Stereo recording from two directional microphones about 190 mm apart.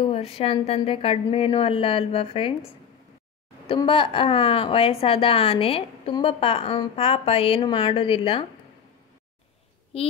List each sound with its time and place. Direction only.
0.0 s a woman's voice: 30° left (ahead or behind)
3.6 s a woman's voice: 25° left (ahead or behind)
9.9 s a child's voice: 30° left (ahead or behind)